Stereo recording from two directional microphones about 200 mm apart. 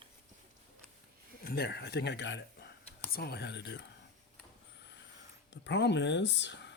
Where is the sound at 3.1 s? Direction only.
50° left (ahead or behind).